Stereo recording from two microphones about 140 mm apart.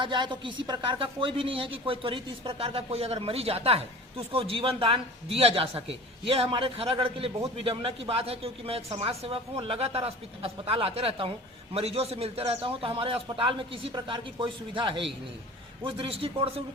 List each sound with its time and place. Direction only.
0.0 s a man's voice: 35° right (ahead or behind)